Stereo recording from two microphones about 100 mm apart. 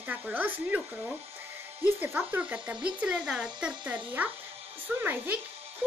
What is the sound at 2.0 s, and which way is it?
Speech, 15° right (ahead or behind).